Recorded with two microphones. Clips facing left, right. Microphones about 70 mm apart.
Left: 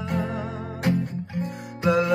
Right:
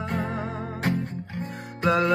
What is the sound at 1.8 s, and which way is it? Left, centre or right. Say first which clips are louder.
Music: left 1 dB; right.